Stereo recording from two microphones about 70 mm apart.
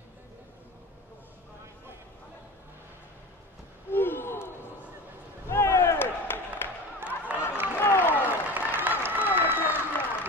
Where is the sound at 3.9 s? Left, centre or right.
Left.